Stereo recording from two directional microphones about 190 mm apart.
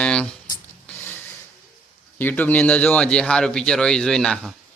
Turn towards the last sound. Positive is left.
turn(degrees=0)  # may be behind; listen again after turning